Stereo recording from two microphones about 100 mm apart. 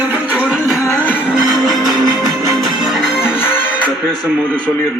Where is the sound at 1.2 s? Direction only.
5° right (ahead or behind).